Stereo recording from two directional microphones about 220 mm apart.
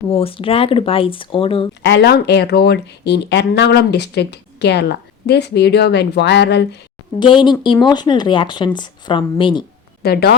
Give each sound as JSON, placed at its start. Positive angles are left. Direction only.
{"t": 0.1, "sound": "speech", "side_deg": 25}
{"t": 1.8, "sound": "speech", "side_deg": 50}
{"t": 7.2, "sound": "speech", "side_deg": 20}
{"t": 10.0, "sound": "speech", "side_deg": 45}